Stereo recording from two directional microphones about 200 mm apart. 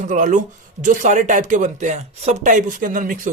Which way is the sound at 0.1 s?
40° right (ahead or behind).